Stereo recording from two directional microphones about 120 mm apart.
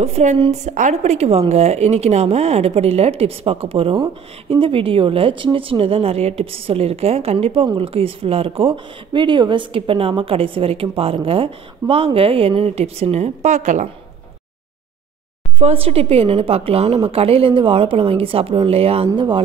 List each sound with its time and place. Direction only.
0.0 s a woman's voice: 70° right (ahead or behind)
0.5 s a woman's voice: 85° right
15.6 s speech: 55° right (ahead or behind)